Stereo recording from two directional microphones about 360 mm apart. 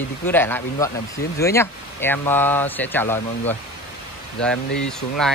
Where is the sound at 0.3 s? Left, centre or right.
Centre.